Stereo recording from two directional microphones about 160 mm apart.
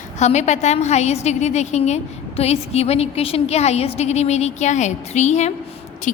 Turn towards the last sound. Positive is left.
turn(degrees=45)  # may be behind; listen again after turning